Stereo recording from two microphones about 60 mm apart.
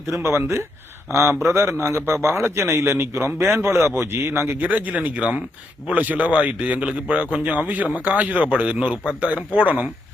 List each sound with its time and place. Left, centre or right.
0.0 s speech: right
4.6 s speech: right